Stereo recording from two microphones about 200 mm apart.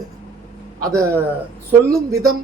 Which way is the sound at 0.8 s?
15° right (ahead or behind).